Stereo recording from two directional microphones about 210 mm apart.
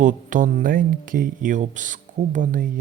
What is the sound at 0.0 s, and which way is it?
Speech, 35° right (ahead or behind).